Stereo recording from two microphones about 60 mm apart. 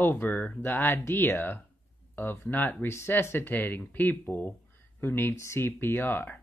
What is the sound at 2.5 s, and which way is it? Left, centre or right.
Speech, left.